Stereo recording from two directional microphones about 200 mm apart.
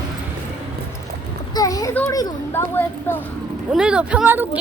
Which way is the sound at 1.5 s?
15° left (ahead or behind).